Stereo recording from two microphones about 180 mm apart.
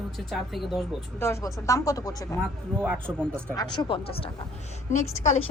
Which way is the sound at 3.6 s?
25° left (ahead or behind).